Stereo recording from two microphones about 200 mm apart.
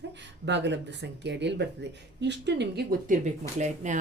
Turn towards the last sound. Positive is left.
turn(degrees=-35)  # may be behind; listen again after turning